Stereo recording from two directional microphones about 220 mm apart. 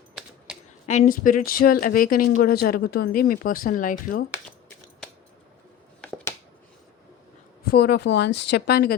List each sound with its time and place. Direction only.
0.1 s a sound: centre (ahead or behind)
0.9 s speech: 35° left (ahead or behind)
6.0 s finger snapping: 5° left (ahead or behind)
7.7 s speech: 45° left (ahead or behind)